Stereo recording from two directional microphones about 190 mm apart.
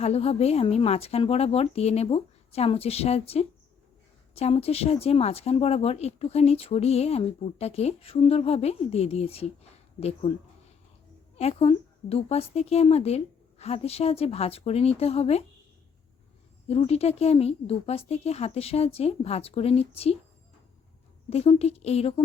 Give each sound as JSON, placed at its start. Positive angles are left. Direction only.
{"t": 0.0, "sound": "speech", "side_deg": 35}
{"t": 11.3, "sound": "speech", "side_deg": 30}
{"t": 16.6, "sound": "speech", "side_deg": 30}
{"t": 21.2, "sound": "speech", "side_deg": 35}